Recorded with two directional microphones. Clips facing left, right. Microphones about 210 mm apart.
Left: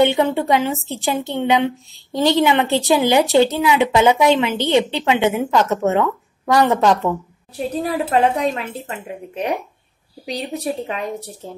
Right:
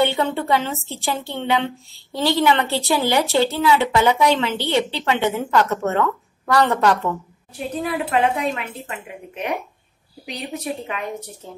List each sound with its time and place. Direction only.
0.0 s a woman's voice: 15° left (ahead or behind)
7.5 s a woman's voice: 35° left (ahead or behind)